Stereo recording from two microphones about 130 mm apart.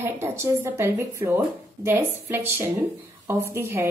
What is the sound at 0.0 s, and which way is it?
A woman's voice, 20° right (ahead or behind).